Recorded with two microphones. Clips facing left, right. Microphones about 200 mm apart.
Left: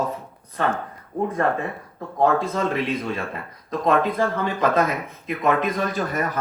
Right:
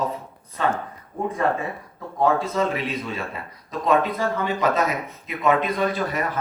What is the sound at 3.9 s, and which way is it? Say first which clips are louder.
A man's voice: even; 55° left (ahead or behind).